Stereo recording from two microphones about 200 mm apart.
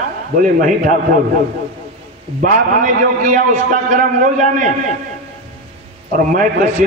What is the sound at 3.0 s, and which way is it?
A man's voice, 40° right (ahead or behind).